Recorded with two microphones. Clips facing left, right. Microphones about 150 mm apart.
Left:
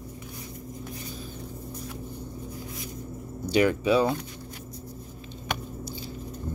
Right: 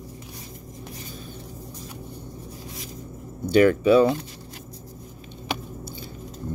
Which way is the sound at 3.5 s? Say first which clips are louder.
Right 6 dB; 50° right (ahead or behind).